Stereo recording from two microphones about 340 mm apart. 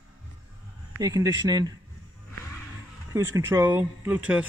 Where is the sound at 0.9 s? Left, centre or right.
Centre.